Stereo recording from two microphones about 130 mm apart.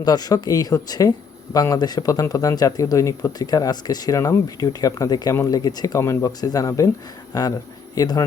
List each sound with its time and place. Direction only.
0.0 s speech: 30° left (ahead or behind)